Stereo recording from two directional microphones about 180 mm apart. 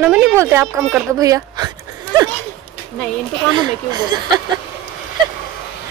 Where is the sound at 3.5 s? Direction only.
25° right (ahead or behind).